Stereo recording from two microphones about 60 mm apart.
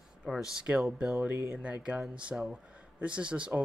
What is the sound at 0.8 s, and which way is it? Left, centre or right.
Speech, centre.